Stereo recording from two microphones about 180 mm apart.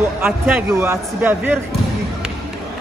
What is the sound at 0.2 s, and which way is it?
A man's voice, 10° right (ahead or behind).